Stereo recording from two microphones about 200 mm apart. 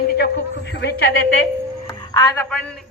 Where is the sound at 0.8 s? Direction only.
55° left (ahead or behind).